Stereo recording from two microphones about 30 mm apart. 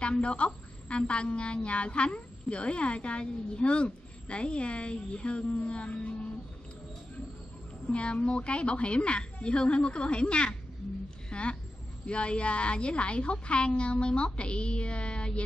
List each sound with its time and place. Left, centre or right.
0.0 s a woman's voice: left
7.9 s a woman's voice: left
11.2 s a sound: left
12.1 s a woman's voice: left